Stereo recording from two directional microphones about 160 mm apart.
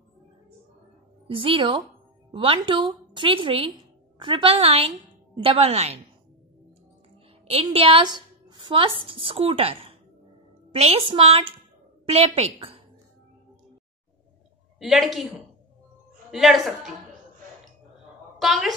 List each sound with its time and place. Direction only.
1.2 s a woman's voice: 35° right (ahead or behind)
7.7 s a woman's voice: 35° right (ahead or behind)
14.8 s a woman's voice: centre (ahead or behind)
18.4 s a woman's voice: centre (ahead or behind)